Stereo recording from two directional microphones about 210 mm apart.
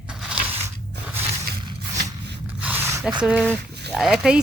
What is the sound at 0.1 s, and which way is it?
Biting, 5° right (ahead or behind).